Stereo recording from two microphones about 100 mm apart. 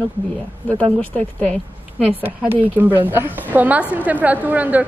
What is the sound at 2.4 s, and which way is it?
Speech, 20° right (ahead or behind).